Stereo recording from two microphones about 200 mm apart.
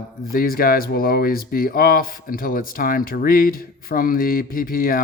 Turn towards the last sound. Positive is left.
turn(degrees=45)  # may be behind; listen again after turning